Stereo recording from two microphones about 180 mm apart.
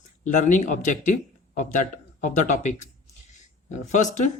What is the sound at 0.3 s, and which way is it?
Speech, 45° left (ahead or behind).